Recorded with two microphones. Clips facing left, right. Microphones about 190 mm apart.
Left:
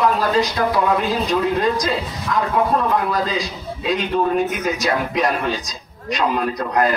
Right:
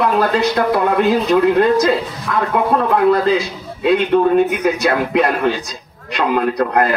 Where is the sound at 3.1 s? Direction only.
60° right (ahead or behind).